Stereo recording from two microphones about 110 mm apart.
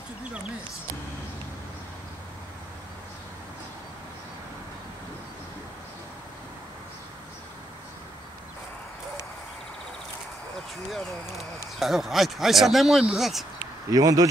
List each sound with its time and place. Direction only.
10.9 s speech: centre (ahead or behind)
13.9 s speech: 35° right (ahead or behind)